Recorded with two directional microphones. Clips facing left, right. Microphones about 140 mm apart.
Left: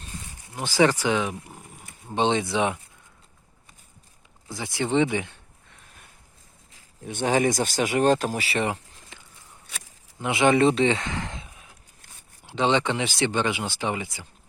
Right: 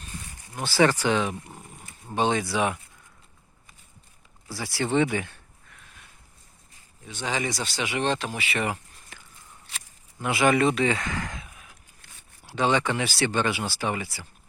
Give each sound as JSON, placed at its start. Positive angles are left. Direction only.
{"t": 0.5, "sound": "speech", "side_deg": 15}
{"t": 2.0, "sound": "speech", "side_deg": 20}
{"t": 4.4, "sound": "speech", "side_deg": 20}
{"t": 7.0, "sound": "speech", "side_deg": 50}